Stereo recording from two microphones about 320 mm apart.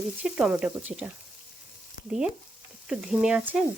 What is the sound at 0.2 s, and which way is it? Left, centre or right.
Speech, centre.